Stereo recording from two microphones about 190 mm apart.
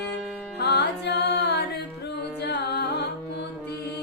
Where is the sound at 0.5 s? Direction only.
60° left (ahead or behind).